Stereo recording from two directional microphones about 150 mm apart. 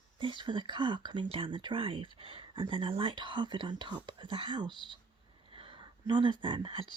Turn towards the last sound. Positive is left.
turn(degrees=-35)  # may be behind; listen again after turning